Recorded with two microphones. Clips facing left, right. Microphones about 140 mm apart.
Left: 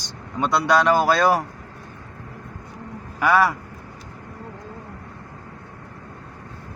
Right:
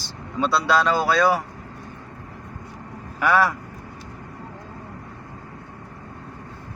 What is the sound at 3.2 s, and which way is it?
Speech, 10° left (ahead or behind).